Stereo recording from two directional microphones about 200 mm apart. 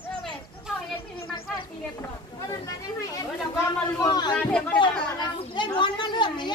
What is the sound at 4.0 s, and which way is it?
Speech, 20° left (ahead or behind).